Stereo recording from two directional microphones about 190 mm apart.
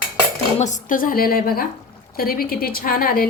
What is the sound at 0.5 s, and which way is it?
A woman's voice, 40° left (ahead or behind).